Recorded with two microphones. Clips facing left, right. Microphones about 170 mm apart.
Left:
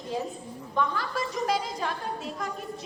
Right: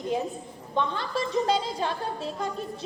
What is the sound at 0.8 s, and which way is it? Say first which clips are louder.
A woman's voice: right 1 dB; 25° right (ahead or behind).